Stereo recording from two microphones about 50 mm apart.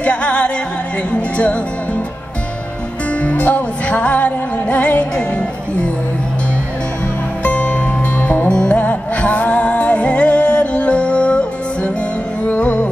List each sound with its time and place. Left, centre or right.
0.0 s music: left
3.2 s music: left
7.4 s music: left